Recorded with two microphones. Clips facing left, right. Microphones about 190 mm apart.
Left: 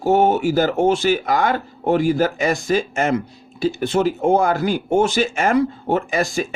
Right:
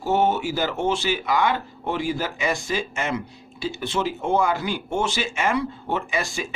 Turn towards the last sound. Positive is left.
turn(degrees=45)  # may be behind; listen again after turning